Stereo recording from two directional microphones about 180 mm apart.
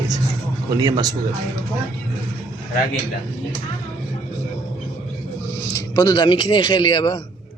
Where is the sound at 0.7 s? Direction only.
20° right (ahead or behind).